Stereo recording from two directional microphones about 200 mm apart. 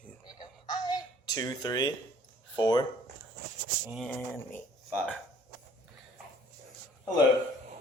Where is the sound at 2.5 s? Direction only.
20° left (ahead or behind).